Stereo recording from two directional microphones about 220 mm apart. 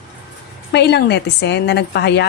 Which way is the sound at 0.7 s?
50° left (ahead or behind).